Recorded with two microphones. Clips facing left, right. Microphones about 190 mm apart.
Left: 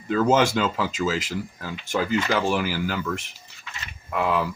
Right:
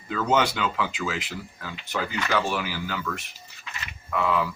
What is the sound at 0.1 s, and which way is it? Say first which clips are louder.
Speech: left 4 dB; 40° left (ahead or behind).